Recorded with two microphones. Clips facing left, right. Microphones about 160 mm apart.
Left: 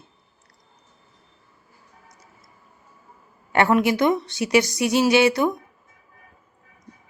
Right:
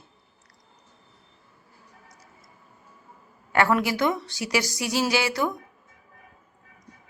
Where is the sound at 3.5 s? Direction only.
20° left (ahead or behind).